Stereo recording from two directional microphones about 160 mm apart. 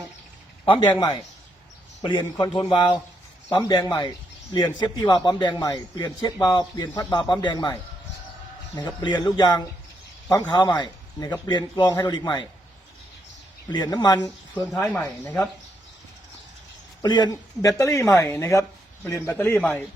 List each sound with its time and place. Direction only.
0.6 s a man's voice: 30° left (ahead or behind)
13.7 s speech: 25° left (ahead or behind)
14.7 s speech: 5° left (ahead or behind)
17.0 s speech: 25° left (ahead or behind); by 19.8 s 10° left (ahead or behind)